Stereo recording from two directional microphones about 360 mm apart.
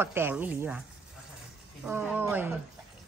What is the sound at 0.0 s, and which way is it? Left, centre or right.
Speech, centre.